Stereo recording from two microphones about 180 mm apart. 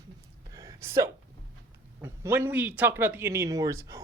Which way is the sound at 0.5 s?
15° right (ahead or behind).